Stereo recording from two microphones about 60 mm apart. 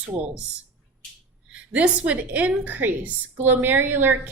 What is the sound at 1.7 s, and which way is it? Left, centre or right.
A woman's voice, right.